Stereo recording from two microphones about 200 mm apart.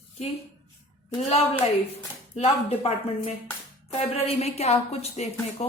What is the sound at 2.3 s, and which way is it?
A woman's voice, 30° left (ahead or behind).